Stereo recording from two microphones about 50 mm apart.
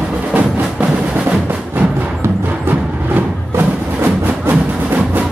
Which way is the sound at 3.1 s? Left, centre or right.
Right.